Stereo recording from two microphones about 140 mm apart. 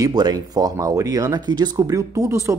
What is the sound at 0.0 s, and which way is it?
Speech, 30° right (ahead or behind).